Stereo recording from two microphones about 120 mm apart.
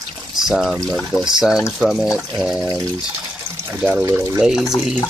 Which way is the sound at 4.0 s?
25° right (ahead or behind).